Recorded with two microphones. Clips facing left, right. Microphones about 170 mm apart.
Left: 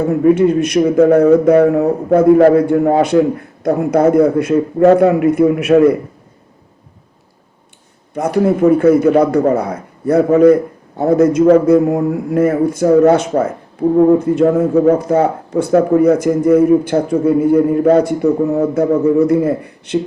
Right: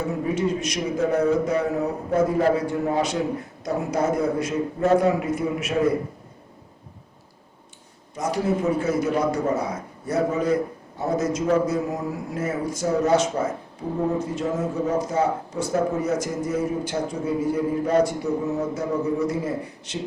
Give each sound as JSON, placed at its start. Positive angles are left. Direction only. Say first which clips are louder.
{"t": 0.3, "sound": "speech", "louder": "left 15 dB", "side_deg": 60}
{"t": 8.1, "sound": "speech", "louder": "left 10 dB", "side_deg": 60}